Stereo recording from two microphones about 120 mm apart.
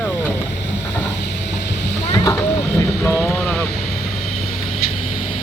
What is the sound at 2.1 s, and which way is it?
Vehicle, 30° left (ahead or behind).